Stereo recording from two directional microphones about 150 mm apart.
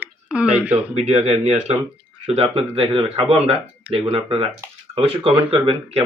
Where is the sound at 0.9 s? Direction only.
45° right (ahead or behind).